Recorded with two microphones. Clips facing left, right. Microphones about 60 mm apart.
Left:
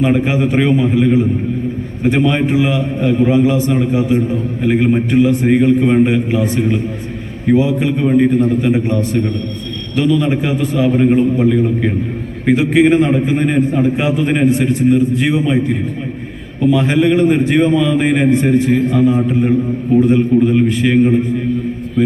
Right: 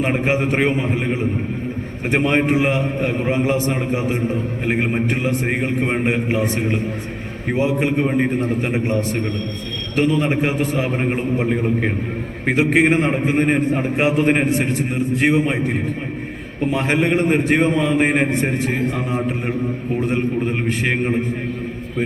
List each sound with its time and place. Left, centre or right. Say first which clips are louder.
0.0 s a man's voice: left 5 dB; right
4.9 s a man's voice: left 8 dB; right
5.2 s a man's voice: left 9 dB; right
8.0 s a man's voice: left 7 dB; right
16.6 s a man's voice: left 6 dB; right